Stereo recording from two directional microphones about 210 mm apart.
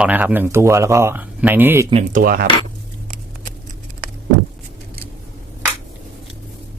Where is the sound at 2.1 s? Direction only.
45° right (ahead or behind).